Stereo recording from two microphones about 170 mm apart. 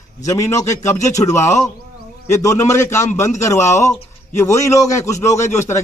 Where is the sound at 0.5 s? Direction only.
15° left (ahead or behind).